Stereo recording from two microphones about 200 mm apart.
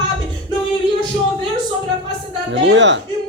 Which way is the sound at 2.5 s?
65° right (ahead or behind).